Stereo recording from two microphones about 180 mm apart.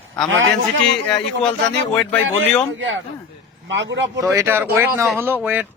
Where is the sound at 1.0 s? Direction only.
5° left (ahead or behind).